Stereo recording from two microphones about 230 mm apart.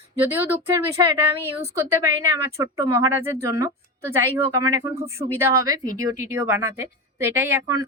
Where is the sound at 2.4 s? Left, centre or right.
Centre.